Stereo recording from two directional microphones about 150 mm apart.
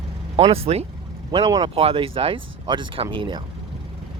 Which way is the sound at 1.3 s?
30° right (ahead or behind).